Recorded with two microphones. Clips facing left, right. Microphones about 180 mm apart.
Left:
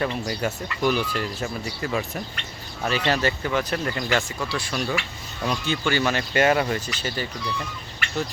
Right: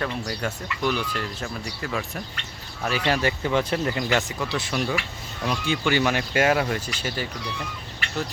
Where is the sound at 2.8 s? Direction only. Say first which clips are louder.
Left 1 dB; 10° right (ahead or behind).